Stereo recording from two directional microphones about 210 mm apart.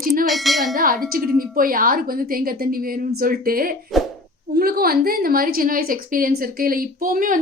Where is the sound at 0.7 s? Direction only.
45° right (ahead or behind).